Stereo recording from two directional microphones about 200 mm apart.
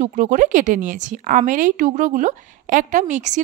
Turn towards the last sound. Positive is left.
turn(degrees=-35)  # may be behind; listen again after turning